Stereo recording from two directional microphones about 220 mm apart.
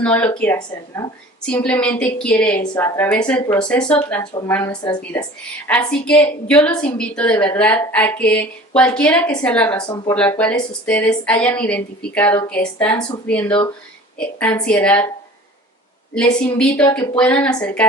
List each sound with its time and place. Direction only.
0.0 s a woman's voice: 5° left (ahead or behind)
4.2 s a woman's voice: 20° left (ahead or behind)
5.6 s a woman's voice: 5° left (ahead or behind)
16.1 s speech: 5° left (ahead or behind)